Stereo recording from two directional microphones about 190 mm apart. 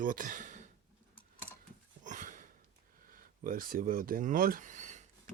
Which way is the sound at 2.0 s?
40° right (ahead or behind).